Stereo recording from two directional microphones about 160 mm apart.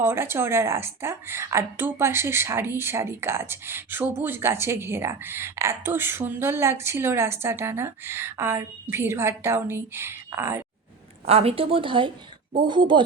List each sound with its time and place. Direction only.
0.0 s a woman's voice: 15° right (ahead or behind)
11.3 s a woman's voice: 40° right (ahead or behind)